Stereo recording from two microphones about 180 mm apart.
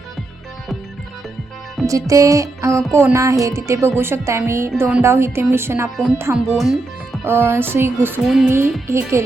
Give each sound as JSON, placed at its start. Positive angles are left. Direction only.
{"t": 1.9, "sound": "speech", "side_deg": -20}
{"t": 6.6, "sound": "music", "side_deg": 0}
{"t": 7.3, "sound": "speech", "side_deg": -15}
{"t": 8.2, "sound": "music", "side_deg": 0}
{"t": 8.4, "sound": "speech", "side_deg": -15}